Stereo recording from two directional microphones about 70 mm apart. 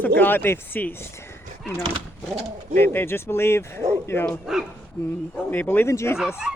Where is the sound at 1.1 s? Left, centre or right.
Left.